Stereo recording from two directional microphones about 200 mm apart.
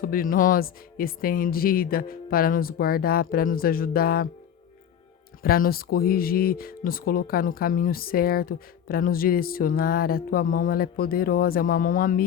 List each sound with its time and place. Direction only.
0.0 s speech: 45° left (ahead or behind)
5.4 s speech: 45° left (ahead or behind)